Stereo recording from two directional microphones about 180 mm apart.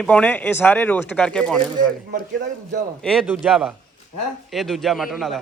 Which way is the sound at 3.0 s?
Centre (ahead or behind).